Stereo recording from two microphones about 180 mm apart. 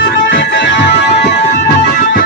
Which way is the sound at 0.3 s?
90° left.